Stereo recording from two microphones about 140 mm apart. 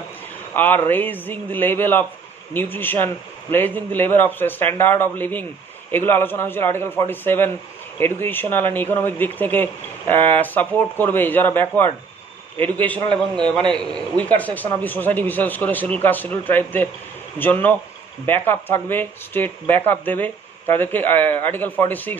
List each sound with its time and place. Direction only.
0.6 s speech: 15° left (ahead or behind)
13.1 s a man's voice: 35° right (ahead or behind)
13.8 s speech: 10° left (ahead or behind)